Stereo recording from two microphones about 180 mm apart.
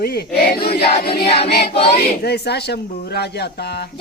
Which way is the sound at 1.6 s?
35° left (ahead or behind).